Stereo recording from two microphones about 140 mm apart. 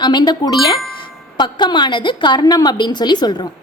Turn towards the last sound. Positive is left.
turn(degrees=30)  # may be behind; listen again after turning